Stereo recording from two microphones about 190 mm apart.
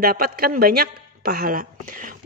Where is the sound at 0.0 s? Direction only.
50° right (ahead or behind).